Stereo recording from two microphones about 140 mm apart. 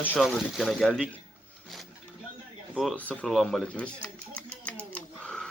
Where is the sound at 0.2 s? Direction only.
Centre (ahead or behind).